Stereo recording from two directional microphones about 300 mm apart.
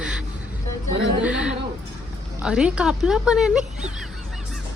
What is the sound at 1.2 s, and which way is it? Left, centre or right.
Speech, centre.